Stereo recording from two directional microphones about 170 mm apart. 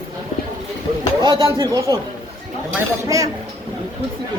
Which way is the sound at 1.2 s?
25° right (ahead or behind).